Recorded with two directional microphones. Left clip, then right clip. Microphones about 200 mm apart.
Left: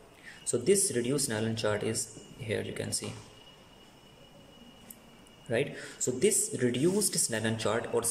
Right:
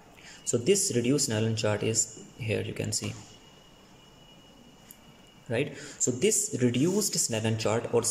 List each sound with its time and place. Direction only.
0.3 s speech: 5° right (ahead or behind)
5.5 s speech: centre (ahead or behind)